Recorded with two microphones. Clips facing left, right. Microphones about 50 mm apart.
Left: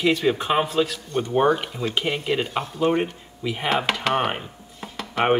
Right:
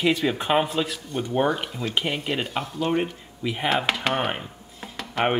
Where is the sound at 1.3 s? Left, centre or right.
Centre.